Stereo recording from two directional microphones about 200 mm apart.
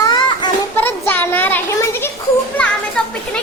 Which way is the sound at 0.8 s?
10° left (ahead or behind).